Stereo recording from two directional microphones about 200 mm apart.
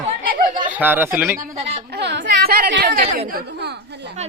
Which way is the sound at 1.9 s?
60° right (ahead or behind).